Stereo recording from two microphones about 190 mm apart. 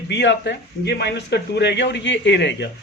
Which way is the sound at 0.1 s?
65° left (ahead or behind).